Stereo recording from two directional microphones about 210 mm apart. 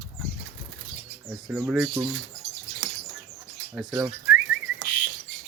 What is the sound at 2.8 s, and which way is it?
Bird, 60° right (ahead or behind).